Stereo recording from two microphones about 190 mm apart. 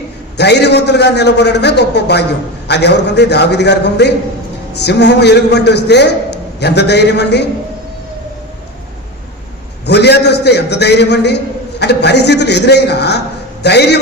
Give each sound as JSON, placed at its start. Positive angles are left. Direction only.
{"t": 0.3, "sound": "a man's voice", "side_deg": 60}
{"t": 9.8, "sound": "a man's voice", "side_deg": 60}